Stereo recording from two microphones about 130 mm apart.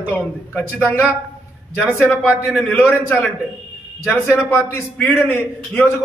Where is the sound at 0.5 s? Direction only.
20° left (ahead or behind).